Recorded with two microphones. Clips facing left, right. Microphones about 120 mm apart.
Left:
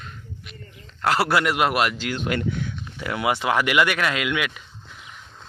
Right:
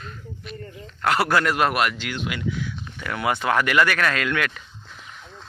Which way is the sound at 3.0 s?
20° left (ahead or behind).